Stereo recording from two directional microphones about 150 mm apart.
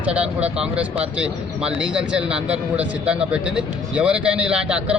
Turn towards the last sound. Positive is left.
turn(degrees=-5)  # may be behind; listen again after turning